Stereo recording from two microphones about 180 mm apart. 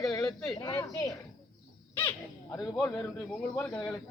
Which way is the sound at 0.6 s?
20° left (ahead or behind).